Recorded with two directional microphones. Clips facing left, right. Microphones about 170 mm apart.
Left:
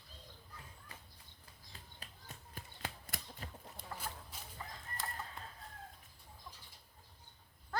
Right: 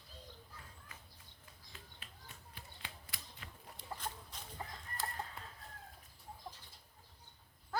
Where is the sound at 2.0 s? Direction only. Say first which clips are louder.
Left 2 dB; 40° left (ahead or behind).